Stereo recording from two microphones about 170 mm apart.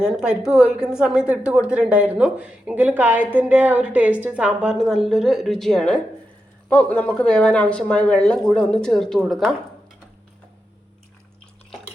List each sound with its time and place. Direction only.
0.0 s a woman's voice: 5° right (ahead or behind)